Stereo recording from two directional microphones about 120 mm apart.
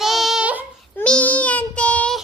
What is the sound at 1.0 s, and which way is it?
Child singing, 10° left (ahead or behind).